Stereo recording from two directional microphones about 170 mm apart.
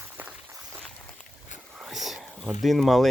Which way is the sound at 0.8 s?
5° left (ahead or behind).